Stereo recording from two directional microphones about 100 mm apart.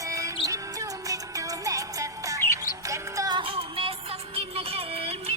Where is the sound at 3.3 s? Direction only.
60° right (ahead or behind); by 5.3 s 75° right (ahead or behind).